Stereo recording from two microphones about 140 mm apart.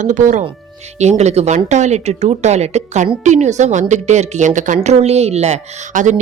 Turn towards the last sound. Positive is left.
turn(degrees=-60)  # may be behind; listen again after turning